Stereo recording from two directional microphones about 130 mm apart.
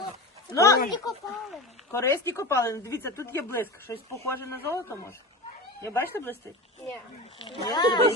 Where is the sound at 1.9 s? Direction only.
20° left (ahead or behind).